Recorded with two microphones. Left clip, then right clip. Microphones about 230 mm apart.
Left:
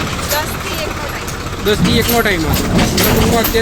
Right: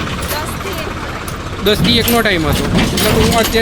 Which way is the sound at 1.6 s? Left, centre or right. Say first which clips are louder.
Right 2 dB; right.